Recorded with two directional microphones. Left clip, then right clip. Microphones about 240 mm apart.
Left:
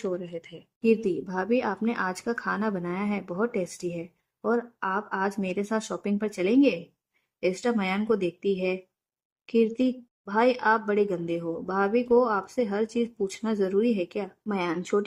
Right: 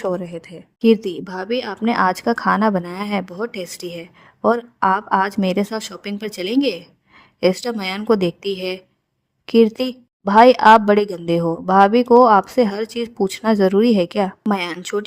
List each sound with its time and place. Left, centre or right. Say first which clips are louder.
0.0 s a woman's voice: right 8 dB; right